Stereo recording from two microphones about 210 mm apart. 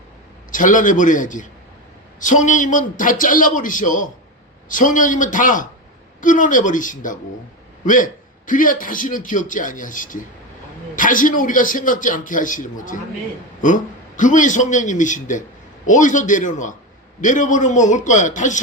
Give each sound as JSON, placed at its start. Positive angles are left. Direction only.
{"t": 0.5, "sound": "a man's voice", "side_deg": 40}